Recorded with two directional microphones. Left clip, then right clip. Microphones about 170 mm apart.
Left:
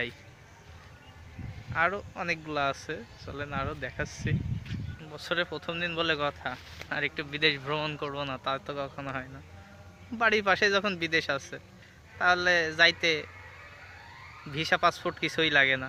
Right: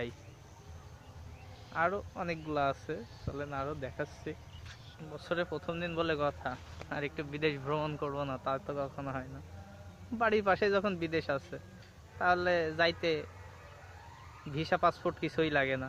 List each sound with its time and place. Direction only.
1.7 s a man's voice: 10° left (ahead or behind)
14.5 s a man's voice: 10° left (ahead or behind)